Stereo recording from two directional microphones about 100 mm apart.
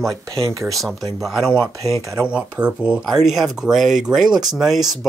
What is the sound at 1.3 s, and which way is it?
Speech, 5° right (ahead or behind).